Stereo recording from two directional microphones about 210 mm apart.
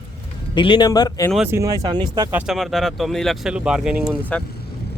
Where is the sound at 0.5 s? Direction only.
20° left (ahead or behind).